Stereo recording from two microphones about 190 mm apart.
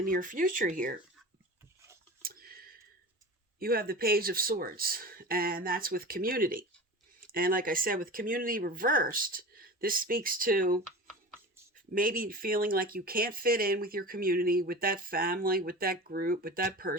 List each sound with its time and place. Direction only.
0.0 s speech: 45° right (ahead or behind)
2.2 s a sound: 50° right (ahead or behind)
3.6 s speech: 50° right (ahead or behind)
11.9 s speech: 50° right (ahead or behind)